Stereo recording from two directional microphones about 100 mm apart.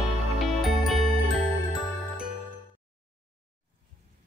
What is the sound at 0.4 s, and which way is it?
Music, centre (ahead or behind).